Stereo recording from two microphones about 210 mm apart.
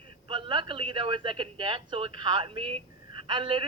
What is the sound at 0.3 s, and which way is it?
A man's voice, 25° right (ahead or behind).